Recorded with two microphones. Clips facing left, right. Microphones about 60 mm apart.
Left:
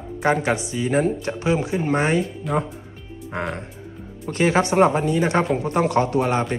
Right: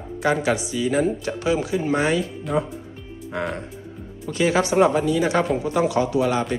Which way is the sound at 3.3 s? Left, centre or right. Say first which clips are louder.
Right 1 dB; left.